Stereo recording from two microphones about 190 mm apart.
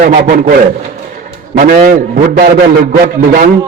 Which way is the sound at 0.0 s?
45° right (ahead or behind).